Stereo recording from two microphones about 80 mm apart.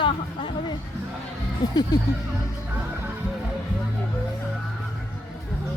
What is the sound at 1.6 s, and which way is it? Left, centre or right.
Speech, left.